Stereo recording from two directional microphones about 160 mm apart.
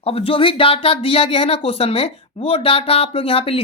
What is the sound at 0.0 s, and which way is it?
Speech, 35° left (ahead or behind).